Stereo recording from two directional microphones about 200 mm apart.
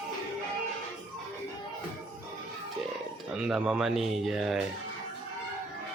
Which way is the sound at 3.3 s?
5° right (ahead or behind).